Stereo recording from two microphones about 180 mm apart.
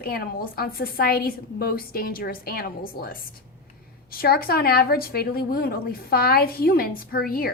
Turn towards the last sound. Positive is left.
turn(degrees=55)  # may be behind; listen again after turning